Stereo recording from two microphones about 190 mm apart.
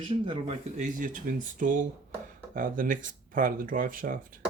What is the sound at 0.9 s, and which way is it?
Speech, 45° right (ahead or behind).